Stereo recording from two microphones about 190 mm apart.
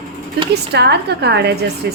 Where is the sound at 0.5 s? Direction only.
60° right (ahead or behind).